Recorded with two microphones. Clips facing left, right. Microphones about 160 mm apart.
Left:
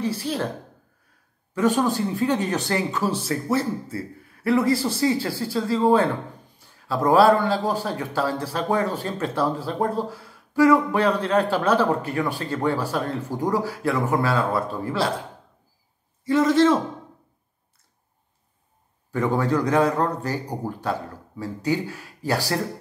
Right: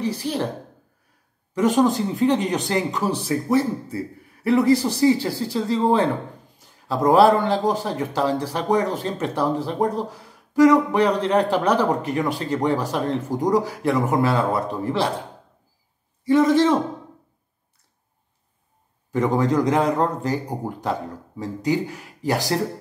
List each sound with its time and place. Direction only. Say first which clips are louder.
0.1 s a man's voice: right 1 dB; 20° right (ahead or behind)
2.0 s a man's voice: right 3 dB; 20° right (ahead or behind)
19.1 s a man's voice: right 2 dB; 20° right (ahead or behind)